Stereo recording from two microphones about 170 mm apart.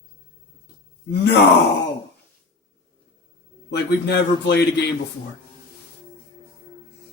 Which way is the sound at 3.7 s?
90° left.